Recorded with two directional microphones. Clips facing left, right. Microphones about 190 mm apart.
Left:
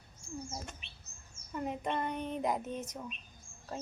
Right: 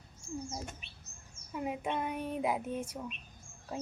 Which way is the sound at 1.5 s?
5° right (ahead or behind).